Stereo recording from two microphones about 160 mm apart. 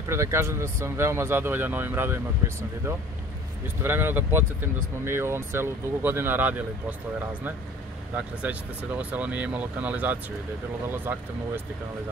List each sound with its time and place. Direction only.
0.1 s speech: 15° right (ahead or behind)
3.8 s speech: 15° right (ahead or behind)
8.4 s speech: 10° right (ahead or behind)